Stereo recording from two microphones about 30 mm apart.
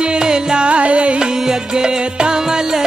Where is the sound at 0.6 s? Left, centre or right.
Right.